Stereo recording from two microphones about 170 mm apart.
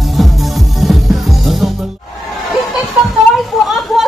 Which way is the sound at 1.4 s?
Centre (ahead or behind).